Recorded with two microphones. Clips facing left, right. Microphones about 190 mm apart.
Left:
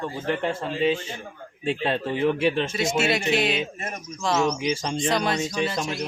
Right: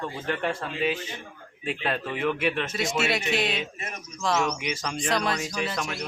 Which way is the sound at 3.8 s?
50° left (ahead or behind).